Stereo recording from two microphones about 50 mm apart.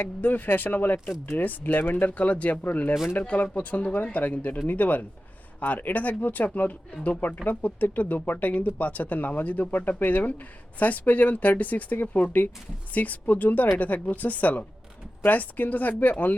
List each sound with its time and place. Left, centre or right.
0.0 s speech: left
2.0 s speech: left